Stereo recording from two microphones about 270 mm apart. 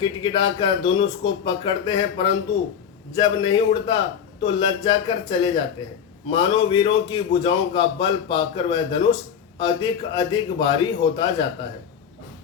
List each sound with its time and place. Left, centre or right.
0.0 s a man's voice: centre